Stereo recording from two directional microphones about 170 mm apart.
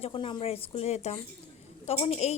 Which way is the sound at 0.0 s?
30° left (ahead or behind).